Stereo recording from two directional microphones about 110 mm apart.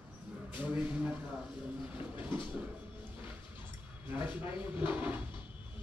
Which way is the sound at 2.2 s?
15° right (ahead or behind).